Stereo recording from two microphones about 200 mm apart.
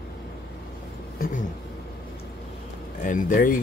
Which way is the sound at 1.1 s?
45° left (ahead or behind).